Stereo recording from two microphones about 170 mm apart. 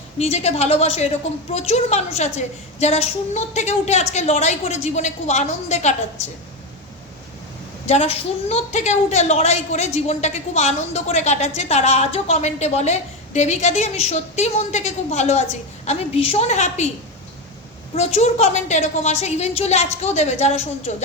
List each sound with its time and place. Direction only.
0.2 s a woman's voice: 40° left (ahead or behind)
7.9 s a woman's voice: 40° left (ahead or behind)
17.9 s a woman's voice: 40° left (ahead or behind)